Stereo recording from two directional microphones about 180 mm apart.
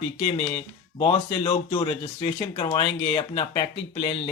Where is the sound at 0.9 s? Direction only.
25° left (ahead or behind).